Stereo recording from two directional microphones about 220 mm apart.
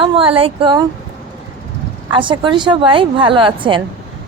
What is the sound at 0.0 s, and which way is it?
Speech, 25° right (ahead or behind).